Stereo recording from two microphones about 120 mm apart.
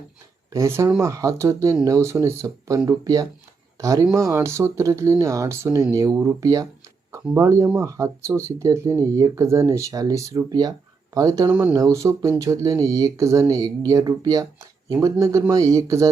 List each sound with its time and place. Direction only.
0.5 s speech: 25° right (ahead or behind)